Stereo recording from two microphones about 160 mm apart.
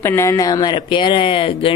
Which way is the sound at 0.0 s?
15° left (ahead or behind).